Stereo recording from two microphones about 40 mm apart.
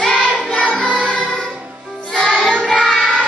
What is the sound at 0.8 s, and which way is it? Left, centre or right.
Music, right.